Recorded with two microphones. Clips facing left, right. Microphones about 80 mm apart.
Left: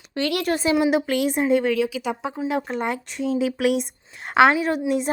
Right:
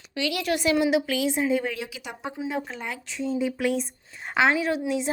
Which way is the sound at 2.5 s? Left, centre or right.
Left.